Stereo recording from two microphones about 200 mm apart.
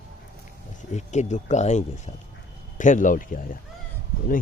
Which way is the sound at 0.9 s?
35° left (ahead or behind).